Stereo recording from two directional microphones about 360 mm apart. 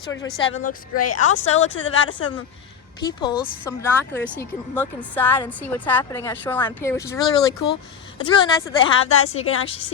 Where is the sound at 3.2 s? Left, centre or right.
Centre.